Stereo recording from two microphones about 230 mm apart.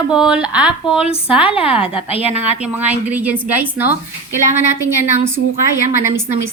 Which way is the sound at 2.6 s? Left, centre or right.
Centre.